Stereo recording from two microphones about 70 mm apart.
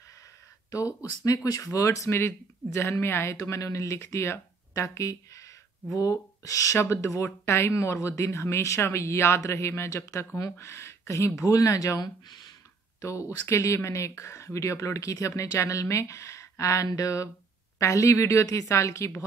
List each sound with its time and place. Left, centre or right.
0.7 s speech: left
2.0 s speech: left
13.0 s speech: left